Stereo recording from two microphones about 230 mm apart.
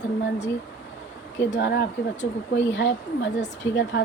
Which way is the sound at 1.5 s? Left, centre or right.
Left.